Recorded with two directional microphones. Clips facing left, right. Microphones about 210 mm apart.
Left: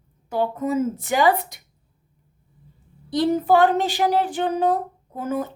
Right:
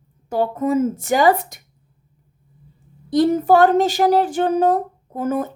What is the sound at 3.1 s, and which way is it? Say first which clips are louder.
Speech: right 4 dB; 45° right (ahead or behind).